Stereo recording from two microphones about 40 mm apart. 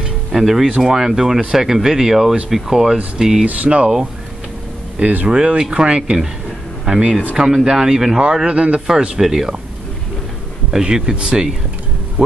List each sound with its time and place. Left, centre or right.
0.3 s speech: centre
3.6 s speech: right
5.2 s speech: right
8.2 s speech: right
10.7 s speech: centre